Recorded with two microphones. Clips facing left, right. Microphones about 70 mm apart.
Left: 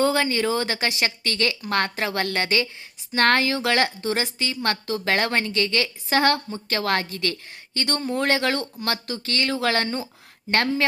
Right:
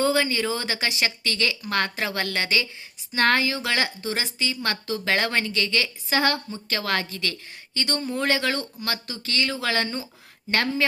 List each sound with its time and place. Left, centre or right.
0.0 s a woman's voice: left